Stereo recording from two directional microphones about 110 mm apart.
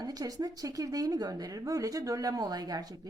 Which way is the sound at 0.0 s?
35° right (ahead or behind).